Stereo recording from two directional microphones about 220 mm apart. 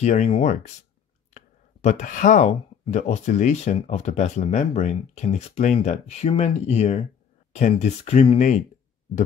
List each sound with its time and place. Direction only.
0.0 s speech: 30° left (ahead or behind)